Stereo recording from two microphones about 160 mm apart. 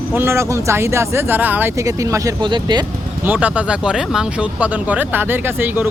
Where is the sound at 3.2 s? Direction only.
10° right (ahead or behind).